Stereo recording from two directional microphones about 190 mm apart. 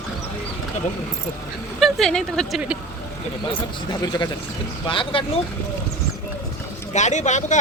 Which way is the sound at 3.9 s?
20° left (ahead or behind).